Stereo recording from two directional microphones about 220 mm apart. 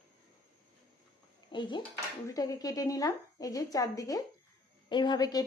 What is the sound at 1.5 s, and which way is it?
Speech, 20° left (ahead or behind).